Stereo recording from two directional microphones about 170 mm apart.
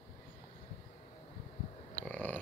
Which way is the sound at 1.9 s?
10° left (ahead or behind).